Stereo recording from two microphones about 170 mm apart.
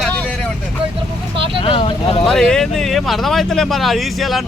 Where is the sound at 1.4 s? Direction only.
30° right (ahead or behind).